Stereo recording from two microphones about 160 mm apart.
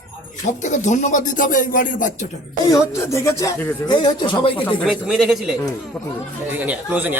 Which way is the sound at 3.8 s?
30° left (ahead or behind).